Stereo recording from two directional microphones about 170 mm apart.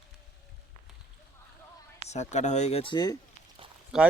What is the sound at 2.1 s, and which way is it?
Speech, 40° left (ahead or behind).